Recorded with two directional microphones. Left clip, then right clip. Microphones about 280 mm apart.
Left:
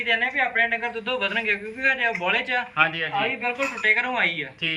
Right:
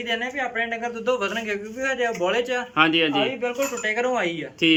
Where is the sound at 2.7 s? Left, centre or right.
Right.